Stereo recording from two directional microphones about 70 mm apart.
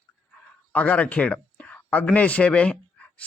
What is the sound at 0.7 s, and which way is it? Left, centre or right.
A man's voice, centre.